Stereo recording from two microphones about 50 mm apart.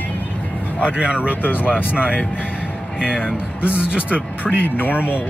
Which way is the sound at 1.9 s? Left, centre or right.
Right.